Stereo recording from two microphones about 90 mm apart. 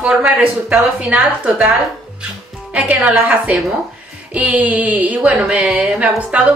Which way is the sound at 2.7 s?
15° right (ahead or behind).